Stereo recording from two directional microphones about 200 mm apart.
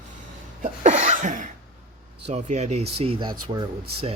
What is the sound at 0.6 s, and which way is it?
Cough, 40° right (ahead or behind).